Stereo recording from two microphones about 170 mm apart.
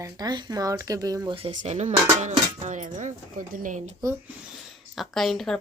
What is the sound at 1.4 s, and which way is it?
Speech, 35° right (ahead or behind).